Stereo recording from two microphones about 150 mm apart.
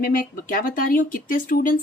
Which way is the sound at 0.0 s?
70° left (ahead or behind).